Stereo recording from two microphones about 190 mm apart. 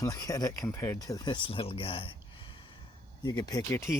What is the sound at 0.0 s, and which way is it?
Speech, 20° left (ahead or behind).